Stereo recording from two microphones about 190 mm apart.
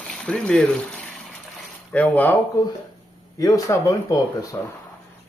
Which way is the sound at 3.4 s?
15° left (ahead or behind).